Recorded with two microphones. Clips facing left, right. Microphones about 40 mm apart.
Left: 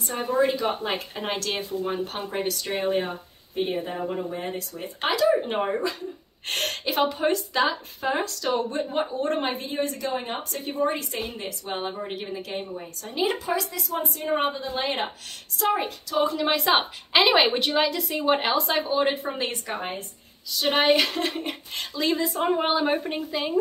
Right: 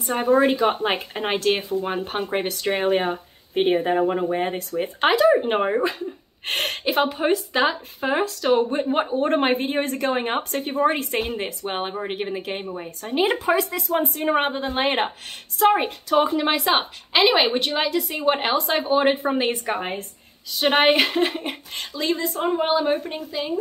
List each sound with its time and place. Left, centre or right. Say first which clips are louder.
0.1 s a woman's voice: right 5 dB; right
5.1 s speech: right 3 dB; right
6.4 s a woman's voice: right 4 dB; centre; by 16.3 s right
16.3 s speech: right 3 dB; right
16.5 s speech: right 1 dB; centre
18.9 s speech: right 5 dB; right; by 23.5 s centre